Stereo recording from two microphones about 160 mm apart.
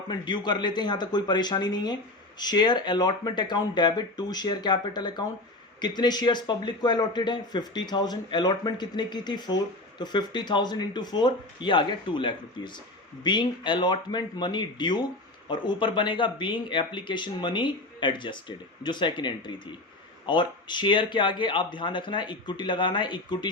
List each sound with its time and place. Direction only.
0.1 s speech: 30° left (ahead or behind)